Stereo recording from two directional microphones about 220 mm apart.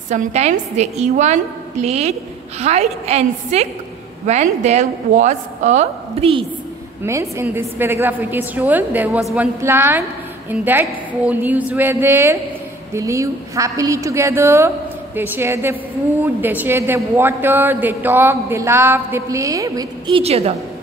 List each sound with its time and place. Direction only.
0.1 s a woman's voice: 30° right (ahead or behind)
7.0 s a woman's voice: 10° right (ahead or behind); by 20.5 s 25° right (ahead or behind)